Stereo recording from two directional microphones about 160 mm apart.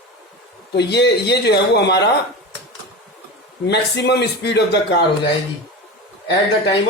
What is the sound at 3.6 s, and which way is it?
A man's voice, 90° left.